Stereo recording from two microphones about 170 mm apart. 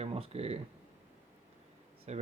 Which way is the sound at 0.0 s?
35° right (ahead or behind).